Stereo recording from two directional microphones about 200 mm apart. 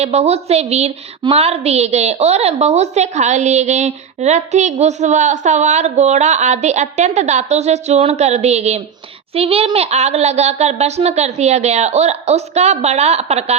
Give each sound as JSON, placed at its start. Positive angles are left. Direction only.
{"t": 0.0, "sound": "a woman's voice", "side_deg": -30}